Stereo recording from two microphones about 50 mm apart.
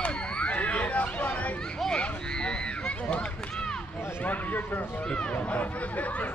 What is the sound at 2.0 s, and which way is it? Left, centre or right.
Run, centre.